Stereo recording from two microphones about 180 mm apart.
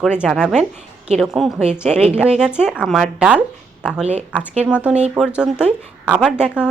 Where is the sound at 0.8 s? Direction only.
35° right (ahead or behind).